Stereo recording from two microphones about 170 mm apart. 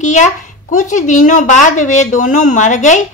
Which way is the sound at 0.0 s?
45° left (ahead or behind).